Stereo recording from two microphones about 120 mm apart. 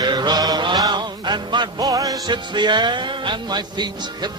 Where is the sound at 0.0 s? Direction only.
35° right (ahead or behind).